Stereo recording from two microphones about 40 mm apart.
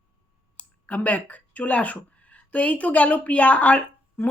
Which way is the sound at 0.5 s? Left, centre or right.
Left.